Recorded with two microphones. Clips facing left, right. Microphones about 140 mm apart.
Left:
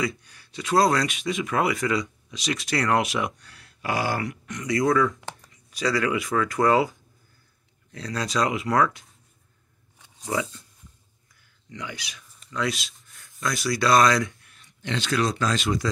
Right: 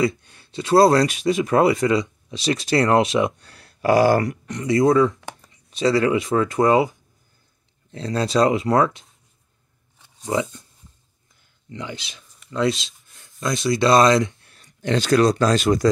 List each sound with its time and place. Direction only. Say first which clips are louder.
0.0 s speech: right 7 dB; 25° right (ahead or behind)
10.2 s speech: right 5 dB; 25° right (ahead or behind)
11.7 s speech: right 4 dB; 25° right (ahead or behind)
12.4 s a sound: right 7 dB; 30° right (ahead or behind)
13.4 s speech: right 5 dB; 25° right (ahead or behind); by 15.9 s 45° right (ahead or behind)